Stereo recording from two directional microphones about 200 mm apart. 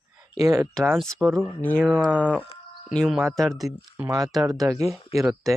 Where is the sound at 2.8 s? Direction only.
Centre (ahead or behind).